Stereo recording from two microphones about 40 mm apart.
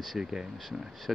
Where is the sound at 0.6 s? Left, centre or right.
Centre.